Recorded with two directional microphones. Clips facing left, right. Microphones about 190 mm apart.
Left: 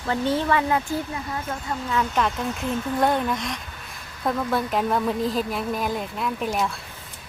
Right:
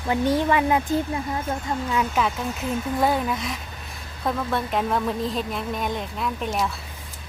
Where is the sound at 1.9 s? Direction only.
5° right (ahead or behind).